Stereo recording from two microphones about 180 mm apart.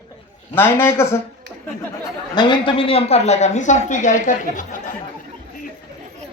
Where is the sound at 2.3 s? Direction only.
25° left (ahead or behind); by 4.8 s 45° left (ahead or behind).